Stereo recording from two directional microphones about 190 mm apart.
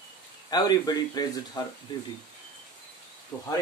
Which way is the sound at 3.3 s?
15° left (ahead or behind).